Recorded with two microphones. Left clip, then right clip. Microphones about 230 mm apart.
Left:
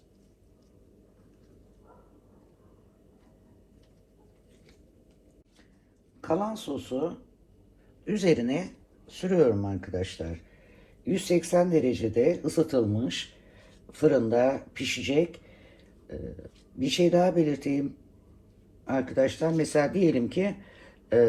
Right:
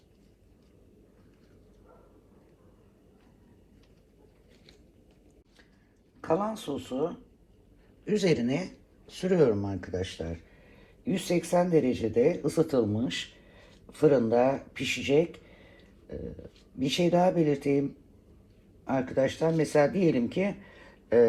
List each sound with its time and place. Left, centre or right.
6.2 s speech: right
8.0 s speech: right
11.0 s speech: right
16.7 s speech: right
18.9 s speech: right